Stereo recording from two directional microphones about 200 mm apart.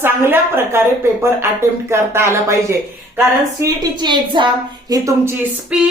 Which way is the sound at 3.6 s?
20° right (ahead or behind).